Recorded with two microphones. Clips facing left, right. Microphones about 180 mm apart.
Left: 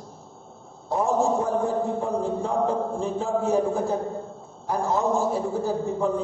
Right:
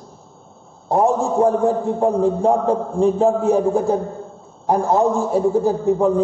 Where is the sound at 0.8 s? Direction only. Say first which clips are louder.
Right 5 dB; 55° right (ahead or behind).